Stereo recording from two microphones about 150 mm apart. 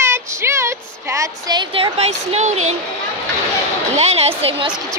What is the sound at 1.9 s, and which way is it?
Speech, 45° right (ahead or behind).